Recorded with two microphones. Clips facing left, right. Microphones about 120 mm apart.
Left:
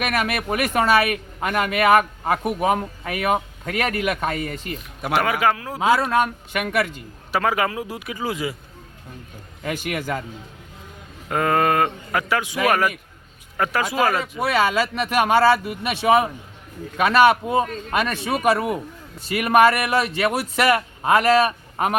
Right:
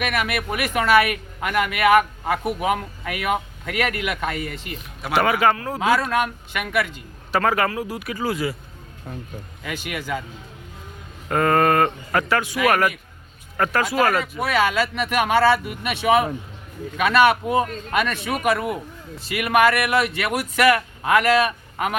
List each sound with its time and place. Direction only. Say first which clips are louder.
0.2 s speech: left 2 dB; 35° left (ahead or behind)
5.1 s speech: right 1 dB; centre (ahead or behind)
5.8 s speech: left 2 dB; 25° left (ahead or behind)
6.7 s speech: even; 40° left (ahead or behind)
7.3 s speech: right 1 dB; 10° left (ahead or behind)
9.6 s a man's voice: left 3 dB; 45° left (ahead or behind)
11.3 s speech: right 2 dB; 10° left (ahead or behind)
13.6 s speech: right 1 dB; 10° left (ahead or behind)
14.3 s speech: left 1 dB; 30° left (ahead or behind)